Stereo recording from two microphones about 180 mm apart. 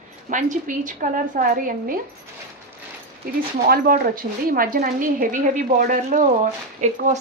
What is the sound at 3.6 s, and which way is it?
Speech, 55° right (ahead or behind).